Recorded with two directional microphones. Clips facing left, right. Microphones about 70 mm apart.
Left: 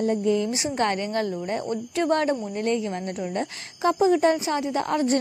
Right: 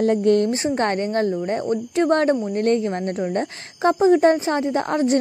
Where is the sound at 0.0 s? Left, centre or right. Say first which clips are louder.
Right 6 dB; right.